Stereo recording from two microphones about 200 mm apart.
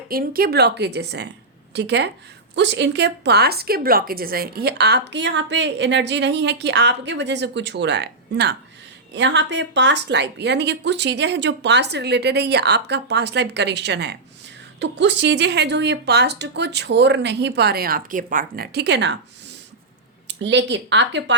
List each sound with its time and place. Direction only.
0.1 s speech: 50° right (ahead or behind)
20.2 s speech: 60° right (ahead or behind)